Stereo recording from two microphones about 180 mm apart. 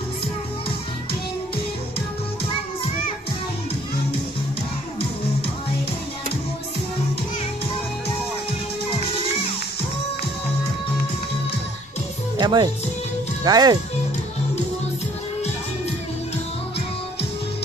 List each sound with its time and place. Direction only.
12.4 s speech: 25° right (ahead or behind)